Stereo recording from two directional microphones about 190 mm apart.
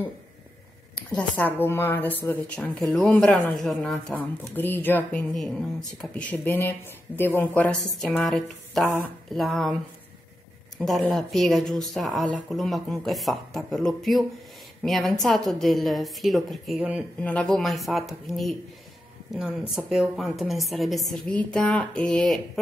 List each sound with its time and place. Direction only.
0.9 s a woman's voice: 5° left (ahead or behind)
10.8 s speech: centre (ahead or behind)
17.2 s speech: 5° left (ahead or behind)